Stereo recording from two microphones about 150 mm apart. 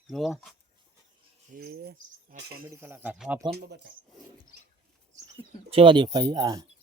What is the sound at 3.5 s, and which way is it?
Speech, 90° right.